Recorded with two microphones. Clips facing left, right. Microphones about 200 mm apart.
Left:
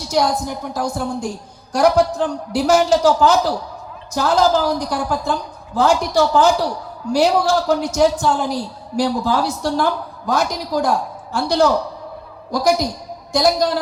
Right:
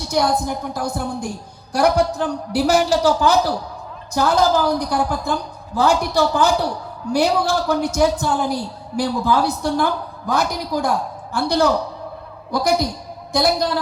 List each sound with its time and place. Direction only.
0.1 s a man's voice: 55° right (ahead or behind)